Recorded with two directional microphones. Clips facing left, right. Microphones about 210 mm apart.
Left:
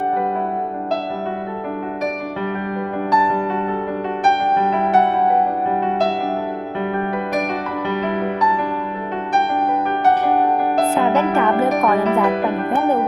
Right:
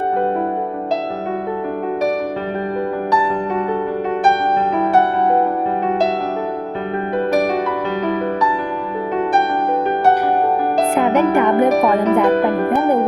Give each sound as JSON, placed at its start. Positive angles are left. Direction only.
{"t": 10.9, "sound": "music", "side_deg": -15}